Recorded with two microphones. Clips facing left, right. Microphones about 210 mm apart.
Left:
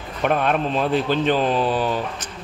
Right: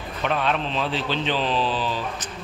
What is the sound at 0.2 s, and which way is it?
A man's voice, 50° left (ahead or behind).